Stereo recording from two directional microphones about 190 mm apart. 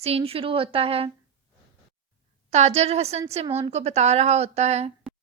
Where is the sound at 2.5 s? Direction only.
35° right (ahead or behind).